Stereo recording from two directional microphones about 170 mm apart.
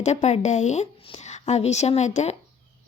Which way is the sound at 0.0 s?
40° left (ahead or behind).